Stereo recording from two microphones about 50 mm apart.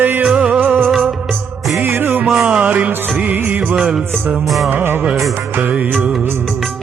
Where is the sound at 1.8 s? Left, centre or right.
Right.